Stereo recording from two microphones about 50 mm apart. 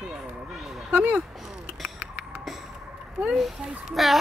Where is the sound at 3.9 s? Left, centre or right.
Centre.